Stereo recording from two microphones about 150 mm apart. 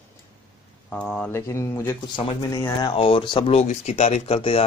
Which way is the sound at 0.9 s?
5° left (ahead or behind).